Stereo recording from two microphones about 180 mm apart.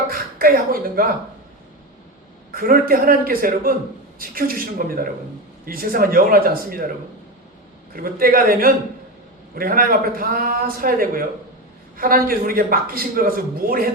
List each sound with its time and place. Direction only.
0.1 s speech: 50° right (ahead or behind)
2.5 s a man's voice: 55° right (ahead or behind)
7.9 s a man's voice: 50° right (ahead or behind)